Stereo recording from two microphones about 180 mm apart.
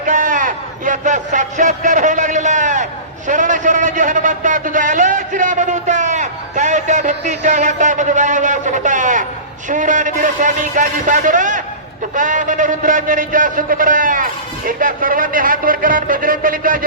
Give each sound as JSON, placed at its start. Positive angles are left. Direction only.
{"t": 0.0, "sound": "a man's voice", "side_deg": -45}